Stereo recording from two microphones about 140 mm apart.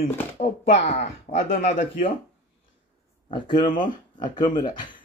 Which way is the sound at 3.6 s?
35° left (ahead or behind).